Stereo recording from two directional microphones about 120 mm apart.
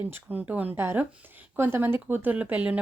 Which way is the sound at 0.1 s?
15° right (ahead or behind).